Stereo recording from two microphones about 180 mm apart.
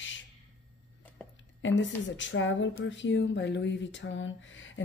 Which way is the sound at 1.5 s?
90° left.